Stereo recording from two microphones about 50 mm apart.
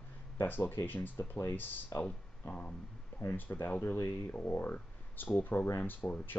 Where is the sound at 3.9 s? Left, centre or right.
Left.